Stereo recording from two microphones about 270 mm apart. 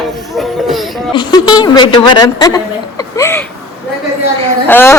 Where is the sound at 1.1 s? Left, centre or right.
Centre.